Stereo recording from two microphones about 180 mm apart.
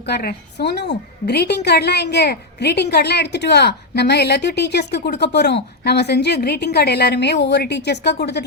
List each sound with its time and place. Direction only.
0.0 s a woman's voice: 60° left (ahead or behind)